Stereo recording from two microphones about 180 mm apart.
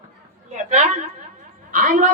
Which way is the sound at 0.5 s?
40° right (ahead or behind).